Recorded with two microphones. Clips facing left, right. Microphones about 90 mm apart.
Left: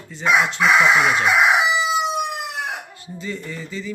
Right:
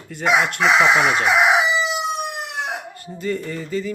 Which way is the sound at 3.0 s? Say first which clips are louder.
Right 5 dB; 50° right (ahead or behind).